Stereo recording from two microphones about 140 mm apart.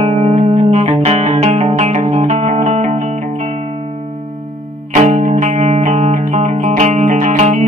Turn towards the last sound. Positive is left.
turn(degrees=-60)  # may be behind; listen again after turning